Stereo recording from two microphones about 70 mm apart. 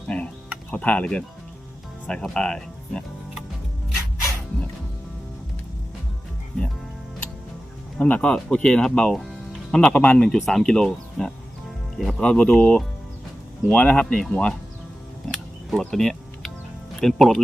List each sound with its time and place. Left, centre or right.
0.1 s a sound: centre
0.7 s speech: centre
7.9 s speech: centre
10.2 s speech: centre
15.8 s a sound: centre
17.0 s speech: centre